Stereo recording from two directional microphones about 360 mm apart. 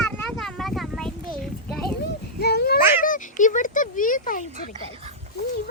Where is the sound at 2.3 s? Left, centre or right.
Left.